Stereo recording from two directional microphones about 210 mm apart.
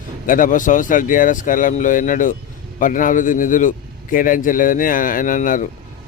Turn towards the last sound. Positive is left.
turn(degrees=40)  # may be behind; listen again after turning